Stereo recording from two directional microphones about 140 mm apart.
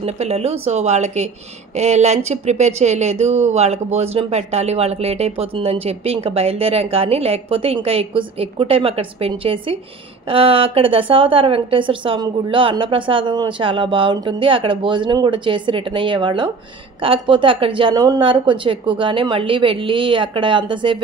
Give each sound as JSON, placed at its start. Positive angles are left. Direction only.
{"t": 0.0, "sound": "a woman's voice", "side_deg": -50}